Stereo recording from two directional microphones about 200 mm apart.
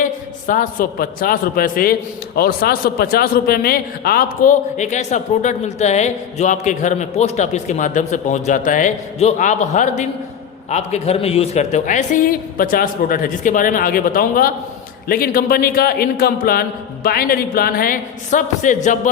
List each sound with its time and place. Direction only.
0.0 s a man's voice: 40° left (ahead or behind)